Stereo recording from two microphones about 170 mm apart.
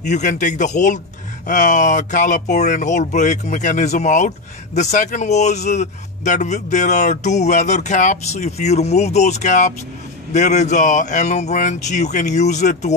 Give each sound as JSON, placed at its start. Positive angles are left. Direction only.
{"t": 0.0, "sound": "speech", "side_deg": 45}